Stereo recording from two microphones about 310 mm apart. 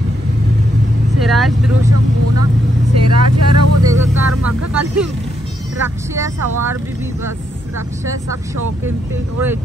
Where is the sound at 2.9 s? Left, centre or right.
Right.